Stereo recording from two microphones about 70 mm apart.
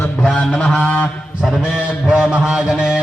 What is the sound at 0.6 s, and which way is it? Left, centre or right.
Honk, centre.